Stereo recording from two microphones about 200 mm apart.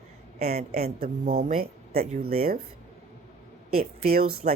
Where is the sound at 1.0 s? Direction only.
50° right (ahead or behind).